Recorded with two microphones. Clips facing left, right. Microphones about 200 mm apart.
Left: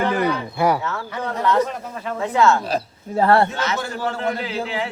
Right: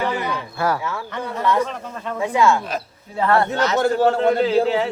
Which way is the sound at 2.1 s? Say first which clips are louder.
Even; 10° right (ahead or behind).